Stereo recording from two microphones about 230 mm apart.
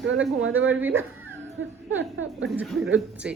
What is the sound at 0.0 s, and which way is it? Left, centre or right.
Speech, right.